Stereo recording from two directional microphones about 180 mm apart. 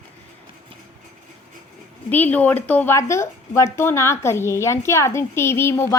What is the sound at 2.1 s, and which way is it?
A woman's voice, 10° left (ahead or behind).